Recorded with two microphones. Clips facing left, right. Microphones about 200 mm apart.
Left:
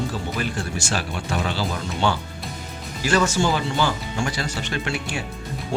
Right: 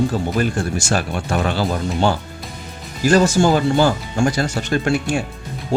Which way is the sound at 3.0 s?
40° right (ahead or behind).